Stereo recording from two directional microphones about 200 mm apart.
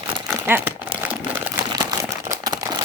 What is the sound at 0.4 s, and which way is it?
Crumpling, 10° right (ahead or behind).